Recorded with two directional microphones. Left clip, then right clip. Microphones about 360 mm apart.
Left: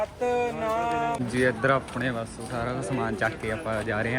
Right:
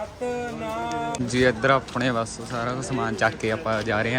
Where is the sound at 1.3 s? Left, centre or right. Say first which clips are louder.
Right 5 dB; centre.